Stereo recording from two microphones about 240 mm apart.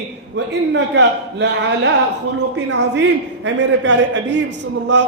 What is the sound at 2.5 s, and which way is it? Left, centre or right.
A man's voice, right.